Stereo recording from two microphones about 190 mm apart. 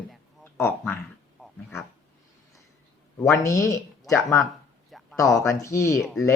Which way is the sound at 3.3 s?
15° left (ahead or behind).